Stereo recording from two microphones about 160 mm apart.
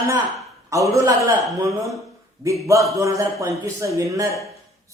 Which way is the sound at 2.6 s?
20° right (ahead or behind).